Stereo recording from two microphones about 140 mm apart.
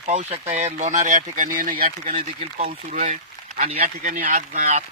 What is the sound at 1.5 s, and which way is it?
Speech, 80° right.